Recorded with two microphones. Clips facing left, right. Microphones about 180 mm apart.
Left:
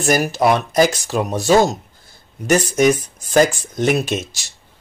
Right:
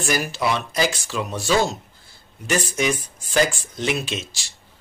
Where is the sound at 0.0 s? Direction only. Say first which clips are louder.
Left 7 dB; 40° left (ahead or behind).